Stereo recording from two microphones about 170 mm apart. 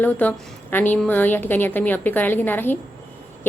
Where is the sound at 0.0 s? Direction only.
10° left (ahead or behind).